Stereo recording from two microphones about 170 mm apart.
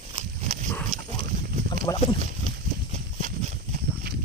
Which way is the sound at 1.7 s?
25° left (ahead or behind).